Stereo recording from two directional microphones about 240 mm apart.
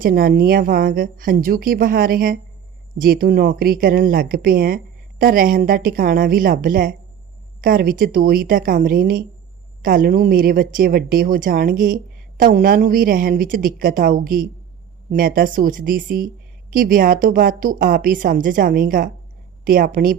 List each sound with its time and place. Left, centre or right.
0.0 s speech: right